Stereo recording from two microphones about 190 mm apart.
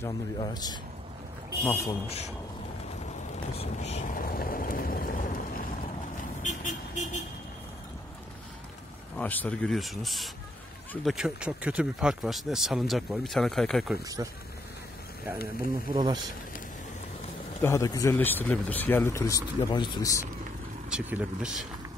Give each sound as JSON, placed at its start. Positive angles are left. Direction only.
{"t": 0.0, "sound": "speech", "side_deg": 20}
{"t": 2.0, "sound": "speech", "side_deg": 35}
{"t": 3.5, "sound": "speech", "side_deg": 35}
{"t": 6.4, "sound": "vehicle", "side_deg": 40}
{"t": 9.1, "sound": "speech", "side_deg": 10}
{"t": 14.0, "sound": "speech", "side_deg": -20}
{"t": 15.9, "sound": "speech", "side_deg": -20}
{"t": 17.6, "sound": "speech", "side_deg": 15}
{"t": 20.9, "sound": "speech", "side_deg": -5}